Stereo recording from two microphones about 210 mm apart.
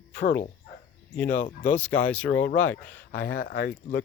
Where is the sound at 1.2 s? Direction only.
35° left (ahead or behind).